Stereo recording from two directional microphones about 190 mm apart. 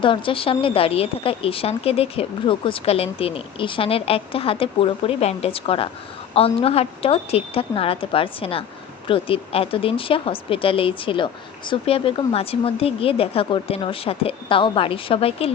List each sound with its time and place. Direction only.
0.0 s a woman's voice: 25° left (ahead or behind)